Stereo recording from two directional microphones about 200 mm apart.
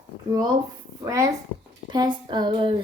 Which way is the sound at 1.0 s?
15° right (ahead or behind).